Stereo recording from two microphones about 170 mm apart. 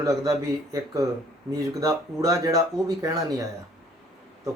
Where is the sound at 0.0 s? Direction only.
20° right (ahead or behind).